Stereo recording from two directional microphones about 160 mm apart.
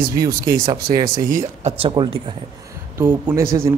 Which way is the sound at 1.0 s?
60° right (ahead or behind).